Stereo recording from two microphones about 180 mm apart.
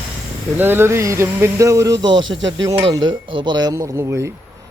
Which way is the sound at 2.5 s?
25° right (ahead or behind).